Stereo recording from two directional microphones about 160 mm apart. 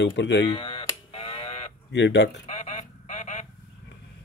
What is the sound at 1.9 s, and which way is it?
Speech, 90° left.